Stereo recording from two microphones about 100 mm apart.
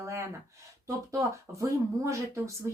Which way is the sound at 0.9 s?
30° right (ahead or behind).